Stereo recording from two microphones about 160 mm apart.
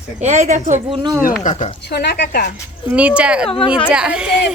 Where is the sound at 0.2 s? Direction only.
45° right (ahead or behind).